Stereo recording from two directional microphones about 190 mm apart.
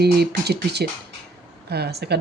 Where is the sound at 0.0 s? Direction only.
60° right (ahead or behind).